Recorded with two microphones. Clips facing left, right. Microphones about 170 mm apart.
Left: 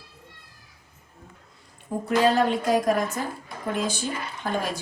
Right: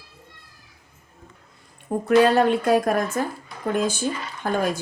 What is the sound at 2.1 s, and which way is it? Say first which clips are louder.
A woman's voice: right 4 dB; 60° right (ahead or behind).